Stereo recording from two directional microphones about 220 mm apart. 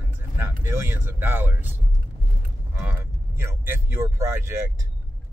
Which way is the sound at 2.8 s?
10° right (ahead or behind).